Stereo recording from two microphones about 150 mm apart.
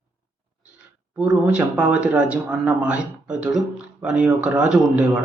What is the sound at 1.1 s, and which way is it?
Speech, 10° right (ahead or behind).